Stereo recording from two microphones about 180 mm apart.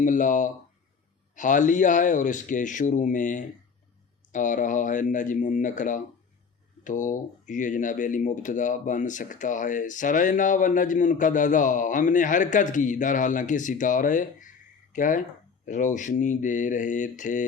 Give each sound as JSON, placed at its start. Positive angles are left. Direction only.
{"t": 0.0, "sound": "speech", "side_deg": 45}